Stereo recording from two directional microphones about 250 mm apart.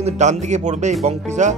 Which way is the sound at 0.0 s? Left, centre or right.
Right.